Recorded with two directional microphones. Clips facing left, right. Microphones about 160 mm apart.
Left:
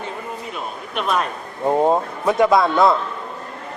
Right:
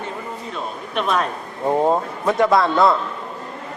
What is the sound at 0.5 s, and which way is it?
Speech, 5° left (ahead or behind).